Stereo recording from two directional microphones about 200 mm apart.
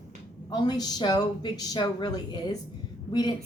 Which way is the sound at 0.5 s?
20° left (ahead or behind).